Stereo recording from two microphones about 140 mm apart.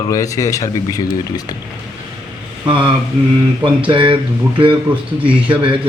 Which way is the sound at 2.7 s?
35° right (ahead or behind).